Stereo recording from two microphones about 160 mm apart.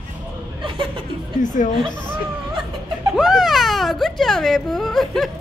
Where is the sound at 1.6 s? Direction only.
55° left (ahead or behind).